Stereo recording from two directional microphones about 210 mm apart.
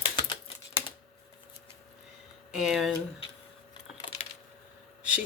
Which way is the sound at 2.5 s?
Centre (ahead or behind).